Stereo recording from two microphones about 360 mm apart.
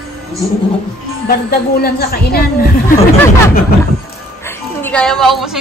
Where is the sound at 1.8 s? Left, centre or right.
Left.